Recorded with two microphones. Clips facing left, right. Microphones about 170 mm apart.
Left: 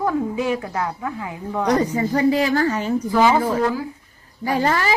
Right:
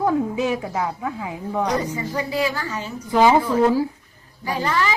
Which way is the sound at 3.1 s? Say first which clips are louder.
Right 2 dB; 20° right (ahead or behind).